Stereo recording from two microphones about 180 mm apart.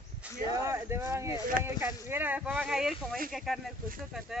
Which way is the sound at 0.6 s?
15° right (ahead or behind).